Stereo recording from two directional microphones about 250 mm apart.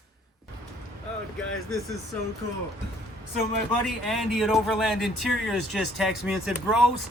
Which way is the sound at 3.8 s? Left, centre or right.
Centre.